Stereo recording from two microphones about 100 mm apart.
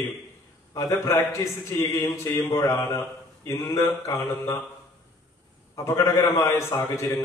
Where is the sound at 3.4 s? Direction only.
30° left (ahead or behind).